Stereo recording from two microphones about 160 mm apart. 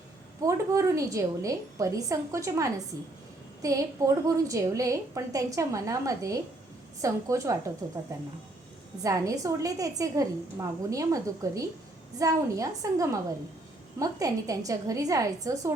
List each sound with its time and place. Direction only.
0.4 s a woman's voice: 20° right (ahead or behind)